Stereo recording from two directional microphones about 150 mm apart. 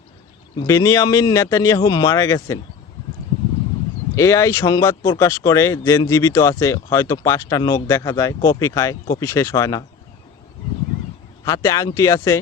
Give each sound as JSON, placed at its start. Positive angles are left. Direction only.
{"t": 0.7, "sound": "speech", "side_deg": 20}
{"t": 4.1, "sound": "speech", "side_deg": 20}
{"t": 11.4, "sound": "speech", "side_deg": 20}